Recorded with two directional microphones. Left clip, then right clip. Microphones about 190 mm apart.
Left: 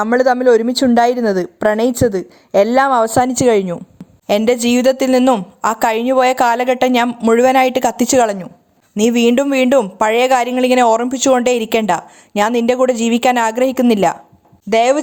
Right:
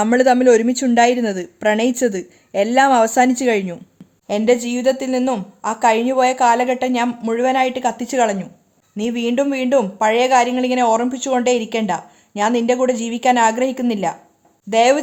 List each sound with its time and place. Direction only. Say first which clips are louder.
0.1 s speech: left 1 dB; 20° left (ahead or behind)
1.1 s a woman's voice: left 4 dB; 5° left (ahead or behind)
1.4 s speech: left 3 dB; 25° left (ahead or behind)
7.1 s speech: left 8 dB; 15° left (ahead or behind)
7.3 s speech: left 5 dB; 40° left (ahead or behind)